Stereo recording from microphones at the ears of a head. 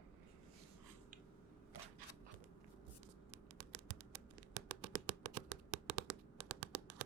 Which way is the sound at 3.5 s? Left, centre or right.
Right.